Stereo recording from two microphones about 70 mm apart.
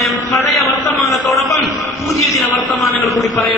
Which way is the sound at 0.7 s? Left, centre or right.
Left.